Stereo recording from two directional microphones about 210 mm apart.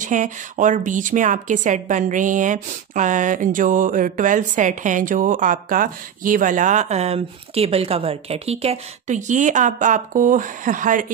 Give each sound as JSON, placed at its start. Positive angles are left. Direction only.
{"t": 0.0, "sound": "a woman's voice", "side_deg": -35}